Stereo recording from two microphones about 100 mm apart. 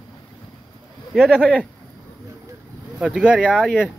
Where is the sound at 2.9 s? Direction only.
5° right (ahead or behind).